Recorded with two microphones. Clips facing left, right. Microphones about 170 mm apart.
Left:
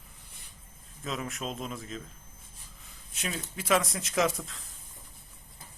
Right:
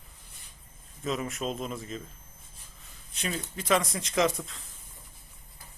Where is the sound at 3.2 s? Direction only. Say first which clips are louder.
Right 2 dB; centre (ahead or behind).